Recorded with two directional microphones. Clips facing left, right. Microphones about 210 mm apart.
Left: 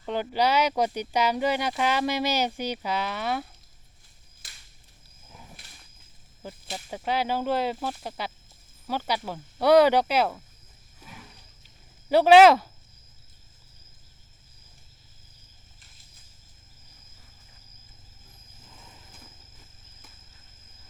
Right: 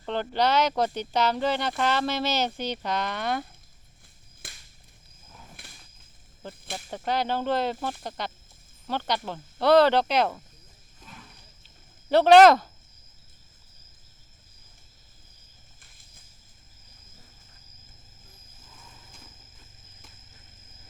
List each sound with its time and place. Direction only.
0.0 s speech: 10° left (ahead or behind)
4.4 s a sound: 55° right (ahead or behind)
6.7 s speech: 5° left (ahead or behind)
11.0 s wild animals: 10° left (ahead or behind)
12.0 s speech: 10° left (ahead or behind)